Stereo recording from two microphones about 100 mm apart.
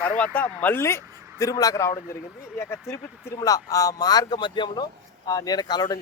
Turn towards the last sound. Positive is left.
turn(degrees=45)  # may be behind; listen again after turning